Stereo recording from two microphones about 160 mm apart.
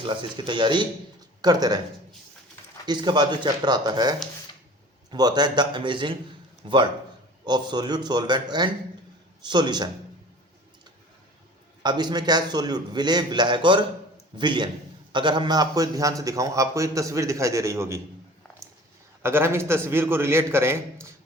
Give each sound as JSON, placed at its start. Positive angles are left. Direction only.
{"t": 0.0, "sound": "a man's voice", "side_deg": -30}
{"t": 2.8, "sound": "a man's voice", "side_deg": -25}
{"t": 5.1, "sound": "a man's voice", "side_deg": -25}
{"t": 11.8, "sound": "a man's voice", "side_deg": -25}
{"t": 19.2, "sound": "a man's voice", "side_deg": -15}